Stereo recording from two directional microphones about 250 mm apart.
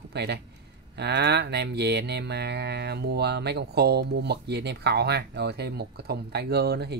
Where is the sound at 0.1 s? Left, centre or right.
Right.